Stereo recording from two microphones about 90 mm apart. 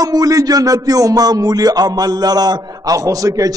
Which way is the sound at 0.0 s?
40° right (ahead or behind).